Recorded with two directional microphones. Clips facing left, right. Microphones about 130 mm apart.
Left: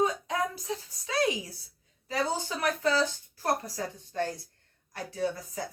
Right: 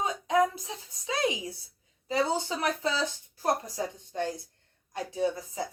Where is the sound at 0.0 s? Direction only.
25° right (ahead or behind).